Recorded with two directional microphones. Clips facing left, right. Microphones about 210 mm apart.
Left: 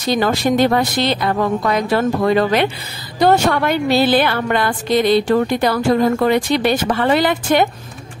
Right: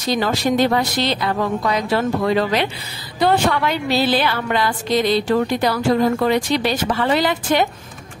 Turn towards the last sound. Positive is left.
turn(degrees=55)  # may be behind; listen again after turning